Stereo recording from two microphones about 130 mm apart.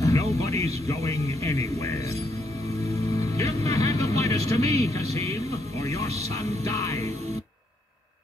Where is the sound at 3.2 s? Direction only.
25° left (ahead or behind).